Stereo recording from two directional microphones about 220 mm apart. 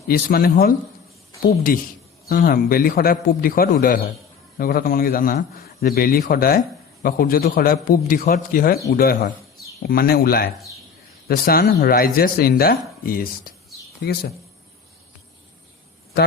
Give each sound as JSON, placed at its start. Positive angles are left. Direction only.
{"t": 0.1, "sound": "a man's voice", "side_deg": 40}